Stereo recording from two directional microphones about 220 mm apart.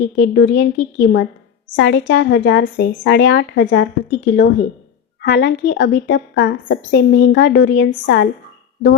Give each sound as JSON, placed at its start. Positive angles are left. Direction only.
{"t": 0.2, "sound": "a woman's voice", "side_deg": 55}